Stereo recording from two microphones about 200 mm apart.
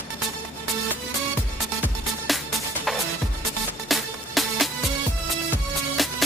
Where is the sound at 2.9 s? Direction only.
Centre (ahead or behind).